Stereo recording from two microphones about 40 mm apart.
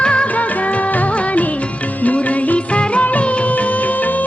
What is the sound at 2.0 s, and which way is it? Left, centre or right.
Music, left.